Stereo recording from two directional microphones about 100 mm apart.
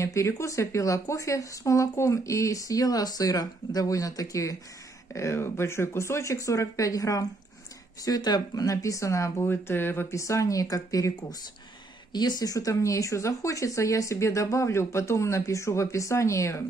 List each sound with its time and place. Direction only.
0.0 s speech: 30° left (ahead or behind)